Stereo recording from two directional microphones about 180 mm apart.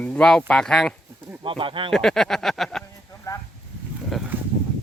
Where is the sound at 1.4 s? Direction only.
30° right (ahead or behind).